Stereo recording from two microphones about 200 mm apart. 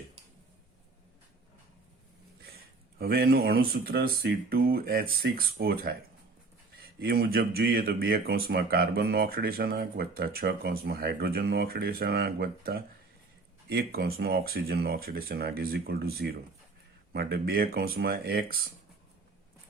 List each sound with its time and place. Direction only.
3.0 s speech: 50° right (ahead or behind)
7.0 s speech: 50° right (ahead or behind)